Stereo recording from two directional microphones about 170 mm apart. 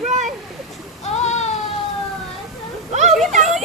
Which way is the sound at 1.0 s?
40° left (ahead or behind).